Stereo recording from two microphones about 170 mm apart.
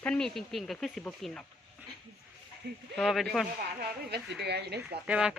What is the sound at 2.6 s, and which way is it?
Speech, 75° right (ahead or behind).